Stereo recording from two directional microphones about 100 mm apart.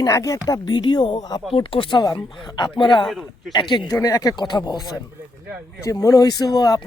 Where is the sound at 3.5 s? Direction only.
50° left (ahead or behind).